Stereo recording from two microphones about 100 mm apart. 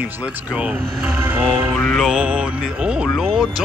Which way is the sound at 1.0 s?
20° right (ahead or behind).